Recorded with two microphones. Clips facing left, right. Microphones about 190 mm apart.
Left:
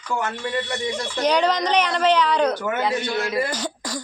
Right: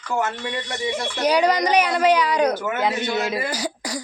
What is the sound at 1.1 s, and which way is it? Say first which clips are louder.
Speech: right 1 dB; 10° right (ahead or behind).